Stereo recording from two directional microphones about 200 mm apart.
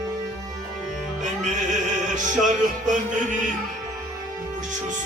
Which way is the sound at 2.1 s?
40° right (ahead or behind).